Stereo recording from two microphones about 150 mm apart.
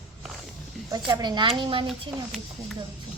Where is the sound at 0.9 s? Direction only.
25° right (ahead or behind).